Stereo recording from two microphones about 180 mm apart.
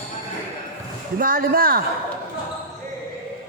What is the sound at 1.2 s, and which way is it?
Speech, 55° right (ahead or behind).